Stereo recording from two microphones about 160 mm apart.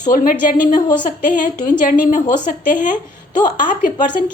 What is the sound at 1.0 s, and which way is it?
A woman's voice, 55° left (ahead or behind).